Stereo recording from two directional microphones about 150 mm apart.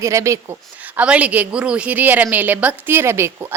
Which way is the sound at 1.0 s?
10° right (ahead or behind).